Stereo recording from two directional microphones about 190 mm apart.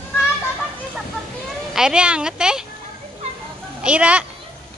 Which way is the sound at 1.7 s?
5° right (ahead or behind).